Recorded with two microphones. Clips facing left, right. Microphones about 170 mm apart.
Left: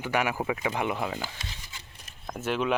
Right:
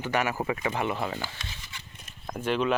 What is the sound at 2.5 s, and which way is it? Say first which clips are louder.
Speech: right 2 dB; 10° left (ahead or behind).